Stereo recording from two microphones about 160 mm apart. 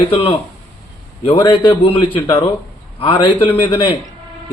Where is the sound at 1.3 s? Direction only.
15° left (ahead or behind).